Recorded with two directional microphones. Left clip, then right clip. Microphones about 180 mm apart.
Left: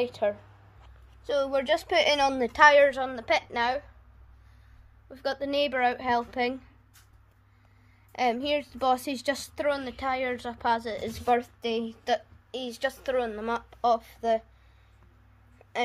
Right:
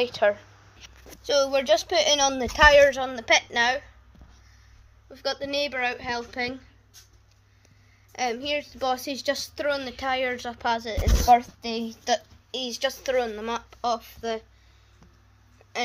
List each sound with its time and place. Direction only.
0.0 s a woman's voice: 10° left (ahead or behind)
1.2 s speech: 15° right (ahead or behind)
1.6 s a woman's voice: centre (ahead or behind)
5.1 s a woman's voice: 10° left (ahead or behind)
8.1 s a woman's voice: 15° left (ahead or behind)
9.6 s a woman's voice: centre (ahead or behind)
11.2 s a woman's voice: 20° left (ahead or behind)
11.8 s a woman's voice: centre (ahead or behind)
15.6 s a sound: 5° left (ahead or behind)